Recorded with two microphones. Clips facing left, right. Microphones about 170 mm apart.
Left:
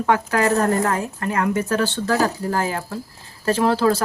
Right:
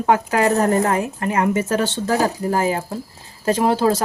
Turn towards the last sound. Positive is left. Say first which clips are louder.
# right 1 dB
turn(degrees=-20)  # may be behind; listen again after turning